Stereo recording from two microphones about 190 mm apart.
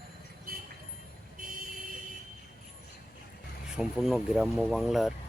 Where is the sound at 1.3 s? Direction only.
45° right (ahead or behind).